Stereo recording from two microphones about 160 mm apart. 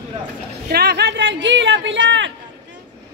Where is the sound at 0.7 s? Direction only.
85° right.